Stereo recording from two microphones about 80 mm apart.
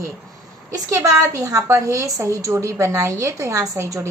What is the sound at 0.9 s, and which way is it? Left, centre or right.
A woman's voice, right.